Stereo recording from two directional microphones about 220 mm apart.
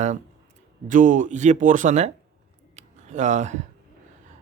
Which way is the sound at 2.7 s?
30° right (ahead or behind).